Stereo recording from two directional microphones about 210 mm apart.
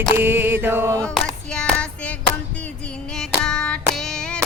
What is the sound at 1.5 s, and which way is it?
Child singing, 5° left (ahead or behind).